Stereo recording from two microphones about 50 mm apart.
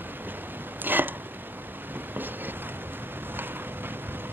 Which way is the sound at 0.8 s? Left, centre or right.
Right.